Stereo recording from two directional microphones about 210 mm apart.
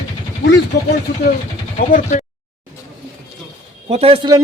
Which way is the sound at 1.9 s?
35° left (ahead or behind).